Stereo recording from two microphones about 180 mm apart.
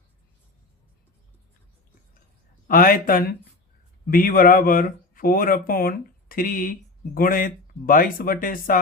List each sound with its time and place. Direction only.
2.6 s speech: 50° left (ahead or behind)